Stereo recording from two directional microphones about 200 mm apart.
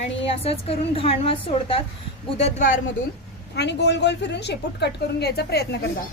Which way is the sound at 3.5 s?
60° left (ahead or behind).